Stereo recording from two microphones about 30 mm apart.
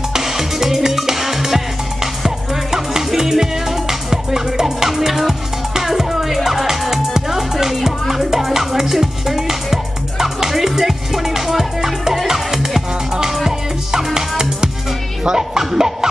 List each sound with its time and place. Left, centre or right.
0.1 s music: centre
6.9 s music: centre